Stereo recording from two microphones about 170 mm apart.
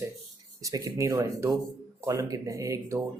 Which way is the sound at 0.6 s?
20° right (ahead or behind).